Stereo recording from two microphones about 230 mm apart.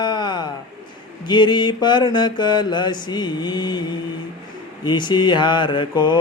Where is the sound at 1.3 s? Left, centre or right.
Centre.